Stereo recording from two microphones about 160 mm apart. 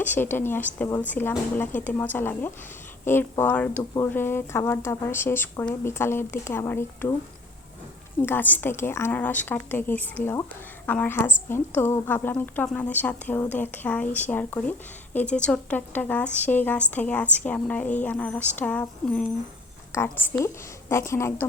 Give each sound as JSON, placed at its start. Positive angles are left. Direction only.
{"t": 0.0, "sound": "speech", "side_deg": 10}
{"t": 8.2, "sound": "a woman's voice", "side_deg": 10}